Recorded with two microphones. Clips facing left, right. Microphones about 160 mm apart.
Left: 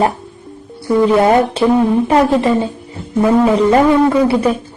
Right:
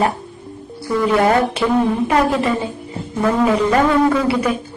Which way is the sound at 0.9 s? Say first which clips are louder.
Left 4 dB; 25° left (ahead or behind).